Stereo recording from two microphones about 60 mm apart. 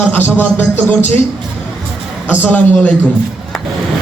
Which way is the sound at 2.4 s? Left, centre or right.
Left.